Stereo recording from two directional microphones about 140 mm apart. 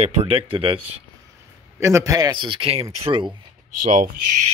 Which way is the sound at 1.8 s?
20° right (ahead or behind).